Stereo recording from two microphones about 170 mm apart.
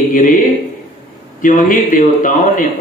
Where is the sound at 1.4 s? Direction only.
50° left (ahead or behind).